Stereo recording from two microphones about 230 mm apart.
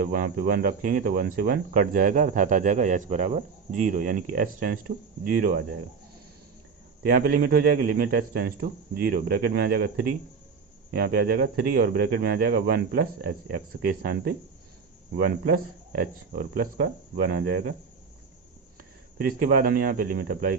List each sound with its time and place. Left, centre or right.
0.1 s speech: right
7.0 s speech: right
10.9 s speech: right
19.2 s speech: right